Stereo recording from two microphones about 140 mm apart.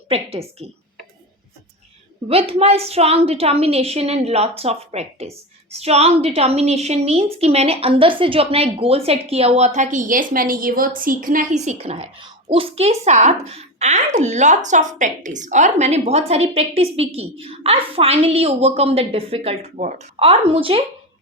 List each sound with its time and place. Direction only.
0.1 s a woman's voice: 45° right (ahead or behind)
2.3 s a woman's voice: 45° right (ahead or behind); by 20.0 s 60° right (ahead or behind)
20.1 s a woman's voice: 45° right (ahead or behind)